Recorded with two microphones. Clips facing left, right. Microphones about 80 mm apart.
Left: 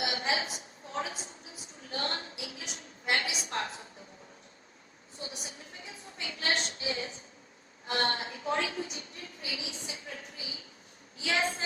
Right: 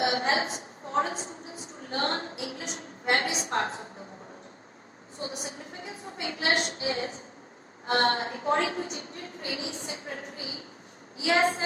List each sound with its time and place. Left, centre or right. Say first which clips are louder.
0.0 s a woman's voice: right 6 dB; right
5.2 s a woman's voice: right 7 dB; right